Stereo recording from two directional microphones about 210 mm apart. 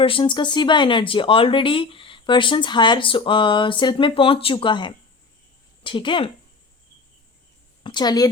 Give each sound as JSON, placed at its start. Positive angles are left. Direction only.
{"t": 0.0, "sound": "speech", "side_deg": 25}
{"t": 7.9, "sound": "a woman's voice", "side_deg": 20}